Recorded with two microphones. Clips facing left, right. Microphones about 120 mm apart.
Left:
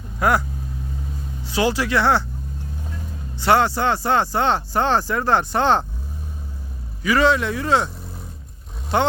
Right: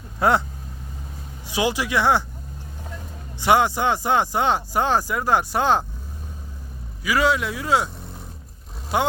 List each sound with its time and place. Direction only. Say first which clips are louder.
0.2 s speech: even; 25° right (ahead or behind)
1.5 s speech: left 2 dB; 15° right (ahead or behind)
3.4 s speech: left 1 dB; 15° right (ahead or behind)
7.0 s speech: left 3 dB; 5° right (ahead or behind)
8.9 s speech: left 2 dB; 5° right (ahead or behind)